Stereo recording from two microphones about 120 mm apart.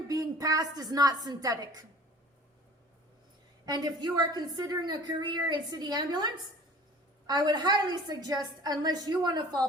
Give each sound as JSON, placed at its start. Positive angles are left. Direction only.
{"t": 0.1, "sound": "a woman's voice", "side_deg": -30}
{"t": 3.7, "sound": "a woman's voice", "side_deg": -35}